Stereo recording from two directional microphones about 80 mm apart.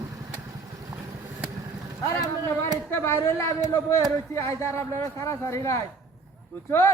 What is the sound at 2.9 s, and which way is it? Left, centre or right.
A man's voice, left.